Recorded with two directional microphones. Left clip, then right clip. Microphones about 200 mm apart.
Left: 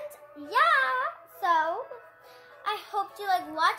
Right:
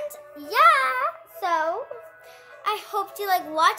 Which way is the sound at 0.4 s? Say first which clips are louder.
Right 5 dB; 40° right (ahead or behind).